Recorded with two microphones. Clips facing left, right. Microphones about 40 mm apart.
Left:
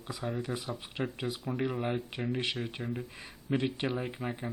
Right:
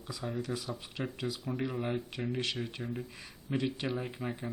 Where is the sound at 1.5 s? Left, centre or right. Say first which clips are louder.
Left 3 dB; centre.